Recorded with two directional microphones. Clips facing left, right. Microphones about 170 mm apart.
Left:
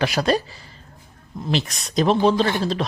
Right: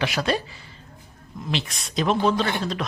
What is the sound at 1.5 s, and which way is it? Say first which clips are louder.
Speech: left 5 dB; 40° left (ahead or behind).